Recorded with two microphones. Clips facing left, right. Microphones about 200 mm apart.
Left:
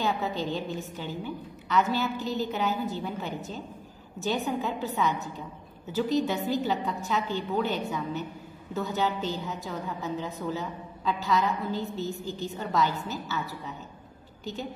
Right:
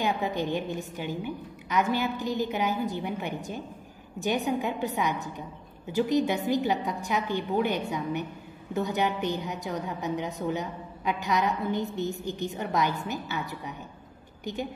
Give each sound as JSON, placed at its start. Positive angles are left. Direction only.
{"t": 0.0, "sound": "a woman's voice", "side_deg": -15}